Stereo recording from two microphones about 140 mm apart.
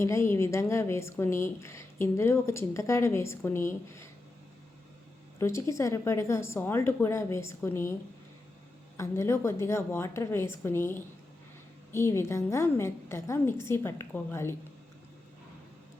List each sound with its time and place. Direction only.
0.0 s a woman's voice: 20° left (ahead or behind)
5.4 s a woman's voice: 20° left (ahead or behind)
9.0 s a woman's voice: 20° left (ahead or behind)